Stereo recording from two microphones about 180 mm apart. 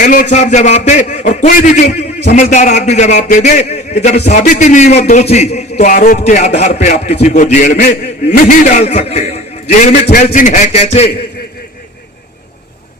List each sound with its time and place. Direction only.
0.0 s a man's voice: 45° left (ahead or behind)